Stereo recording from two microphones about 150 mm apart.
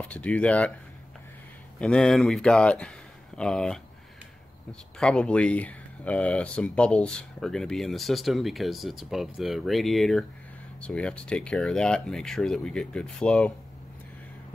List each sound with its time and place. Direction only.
0.0 s speech: 10° left (ahead or behind)
1.8 s speech: 5° left (ahead or behind)
4.9 s speech: 5° left (ahead or behind)